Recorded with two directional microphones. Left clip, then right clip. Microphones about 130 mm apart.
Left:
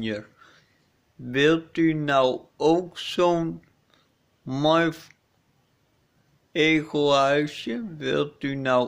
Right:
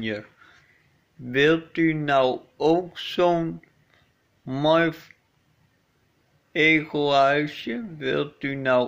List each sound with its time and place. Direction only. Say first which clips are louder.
0.0 s a sound: right 1 dB; 20° left (ahead or behind)
1.2 s speech: right 1 dB; 25° left (ahead or behind)
6.5 s speech: right 2 dB; 30° left (ahead or behind)